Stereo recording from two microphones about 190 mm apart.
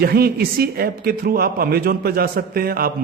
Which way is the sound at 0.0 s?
50° right (ahead or behind).